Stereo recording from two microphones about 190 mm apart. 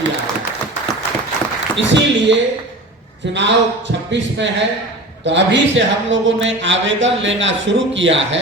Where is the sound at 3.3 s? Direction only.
70° right (ahead or behind).